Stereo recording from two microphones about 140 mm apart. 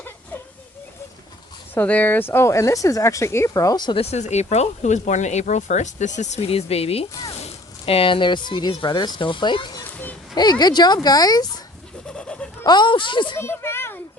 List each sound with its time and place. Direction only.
1.7 s speech: 10° left (ahead or behind); by 4.0 s 30° left (ahead or behind)
4.0 s speech: 50° left (ahead or behind); by 11.4 s 25° left (ahead or behind)
12.0 s goat: 5° left (ahead or behind)
12.6 s speech: 30° left (ahead or behind)
13.3 s a sound: 20° left (ahead or behind)